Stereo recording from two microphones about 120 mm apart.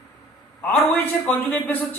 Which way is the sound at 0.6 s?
15° left (ahead or behind).